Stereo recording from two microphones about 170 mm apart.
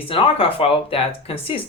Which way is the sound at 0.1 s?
35° left (ahead or behind).